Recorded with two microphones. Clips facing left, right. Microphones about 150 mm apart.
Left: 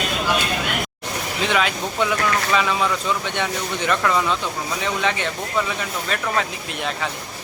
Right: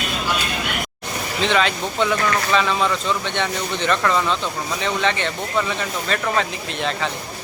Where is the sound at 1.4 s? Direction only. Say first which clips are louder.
Right 2 dB; 10° left (ahead or behind).